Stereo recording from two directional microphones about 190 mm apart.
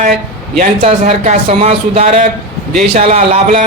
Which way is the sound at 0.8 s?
30° right (ahead or behind).